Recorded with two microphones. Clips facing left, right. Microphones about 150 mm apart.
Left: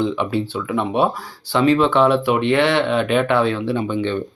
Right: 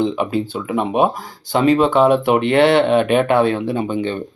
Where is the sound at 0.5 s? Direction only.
20° right (ahead or behind).